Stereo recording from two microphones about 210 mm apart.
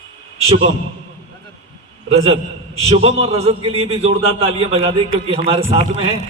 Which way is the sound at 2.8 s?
30° right (ahead or behind).